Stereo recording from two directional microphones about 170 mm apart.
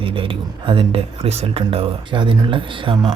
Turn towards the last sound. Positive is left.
turn(degrees=-30)  # may be behind; listen again after turning